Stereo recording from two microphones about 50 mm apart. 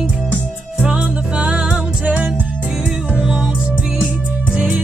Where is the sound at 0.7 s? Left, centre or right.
Centre.